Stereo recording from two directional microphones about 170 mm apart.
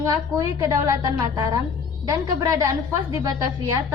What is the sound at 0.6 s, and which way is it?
A woman's voice, 20° right (ahead or behind).